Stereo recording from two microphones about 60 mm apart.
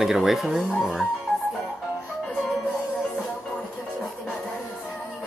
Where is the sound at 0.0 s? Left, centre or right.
Centre.